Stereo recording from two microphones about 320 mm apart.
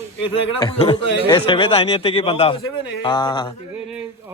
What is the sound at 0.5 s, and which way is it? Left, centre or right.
A man's voice, centre.